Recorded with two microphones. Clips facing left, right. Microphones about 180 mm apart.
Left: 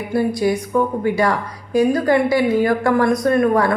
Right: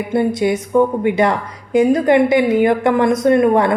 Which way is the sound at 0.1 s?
20° right (ahead or behind).